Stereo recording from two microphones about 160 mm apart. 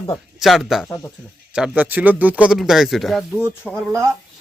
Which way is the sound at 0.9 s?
15° left (ahead or behind).